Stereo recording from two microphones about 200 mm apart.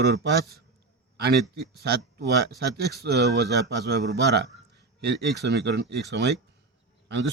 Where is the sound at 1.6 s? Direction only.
55° right (ahead or behind).